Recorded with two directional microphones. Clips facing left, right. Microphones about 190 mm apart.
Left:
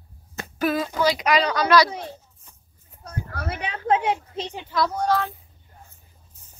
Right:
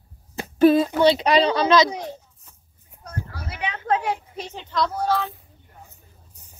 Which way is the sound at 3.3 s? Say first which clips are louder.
Left 6 dB; 55° left (ahead or behind).